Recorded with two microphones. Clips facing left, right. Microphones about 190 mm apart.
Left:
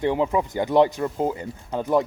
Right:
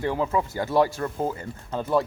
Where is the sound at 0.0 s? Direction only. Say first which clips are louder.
Left 3 dB; 20° left (ahead or behind).